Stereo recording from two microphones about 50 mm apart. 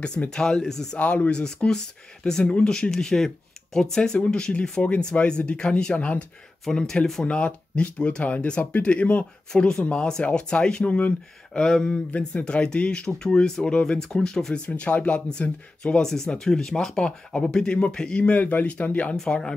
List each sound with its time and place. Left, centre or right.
0.0 s speech: centre
0.9 s speech: left
1.3 s speech: centre
12.4 s speech: centre
14.7 s speech: left
16.0 s speech: centre